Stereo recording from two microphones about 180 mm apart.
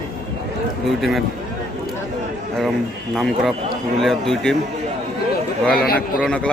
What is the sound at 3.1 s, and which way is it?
Speech, centre (ahead or behind).